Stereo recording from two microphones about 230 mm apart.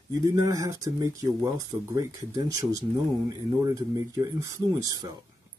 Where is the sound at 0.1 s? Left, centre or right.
Centre.